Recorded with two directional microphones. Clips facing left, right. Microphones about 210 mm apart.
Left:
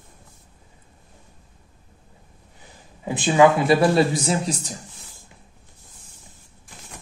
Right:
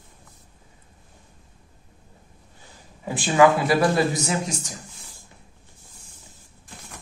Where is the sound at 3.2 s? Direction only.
25° left (ahead or behind).